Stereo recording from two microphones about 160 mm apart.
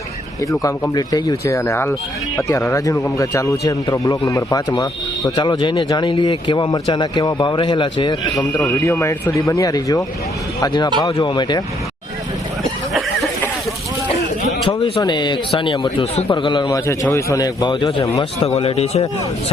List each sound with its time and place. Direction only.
0.6 s speech: 25° left (ahead or behind)
14.6 s speech: 30° left (ahead or behind)
18.1 s speech: 40° left (ahead or behind)